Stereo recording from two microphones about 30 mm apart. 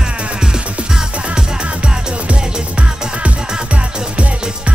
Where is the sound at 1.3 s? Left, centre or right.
Right.